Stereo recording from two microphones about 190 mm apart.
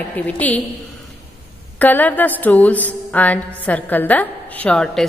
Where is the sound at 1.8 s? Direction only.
10° left (ahead or behind).